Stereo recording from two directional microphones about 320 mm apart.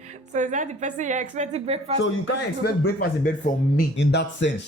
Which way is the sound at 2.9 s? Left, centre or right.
Left.